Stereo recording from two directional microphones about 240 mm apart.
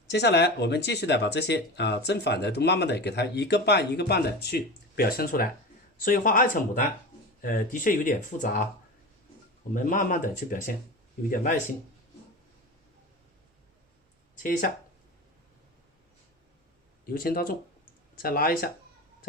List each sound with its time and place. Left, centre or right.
0.1 s speech: left
9.7 s speech: left
14.3 s speech: left
17.1 s speech: left